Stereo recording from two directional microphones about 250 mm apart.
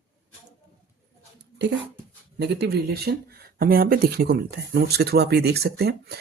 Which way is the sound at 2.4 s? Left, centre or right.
Right.